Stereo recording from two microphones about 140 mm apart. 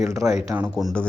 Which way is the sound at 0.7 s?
Centre (ahead or behind).